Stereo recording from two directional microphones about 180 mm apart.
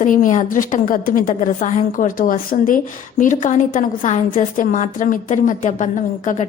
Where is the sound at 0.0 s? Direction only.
45° left (ahead or behind).